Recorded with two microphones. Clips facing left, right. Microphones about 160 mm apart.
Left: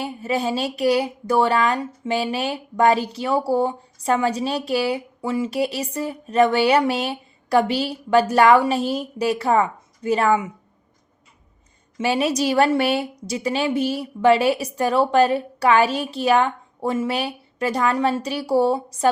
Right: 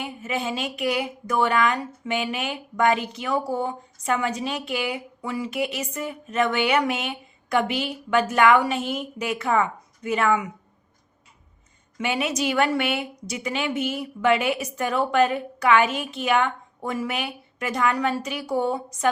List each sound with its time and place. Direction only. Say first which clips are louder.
0.0 s speech: left 5 dB; 35° left (ahead or behind)
11.9 s speech: left 5 dB; 35° left (ahead or behind)